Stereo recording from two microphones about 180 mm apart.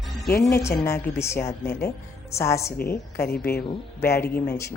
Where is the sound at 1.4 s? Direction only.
60° left (ahead or behind).